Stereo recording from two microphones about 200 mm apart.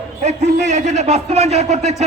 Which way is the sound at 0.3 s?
35° right (ahead or behind).